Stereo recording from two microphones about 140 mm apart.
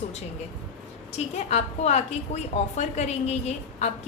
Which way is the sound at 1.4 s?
50° left (ahead or behind).